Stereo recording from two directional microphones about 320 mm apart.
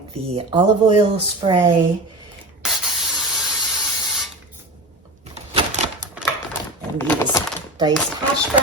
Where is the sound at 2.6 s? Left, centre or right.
Centre.